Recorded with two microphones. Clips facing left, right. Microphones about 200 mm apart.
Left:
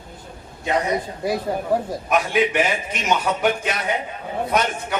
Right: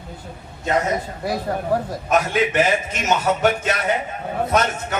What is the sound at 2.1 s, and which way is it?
Speech, 50° right (ahead or behind).